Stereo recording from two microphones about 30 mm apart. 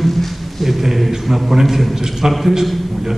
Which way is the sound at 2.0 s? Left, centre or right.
Centre.